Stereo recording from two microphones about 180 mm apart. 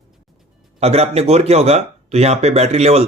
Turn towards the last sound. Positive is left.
turn(degrees=-35)  # may be behind; listen again after turning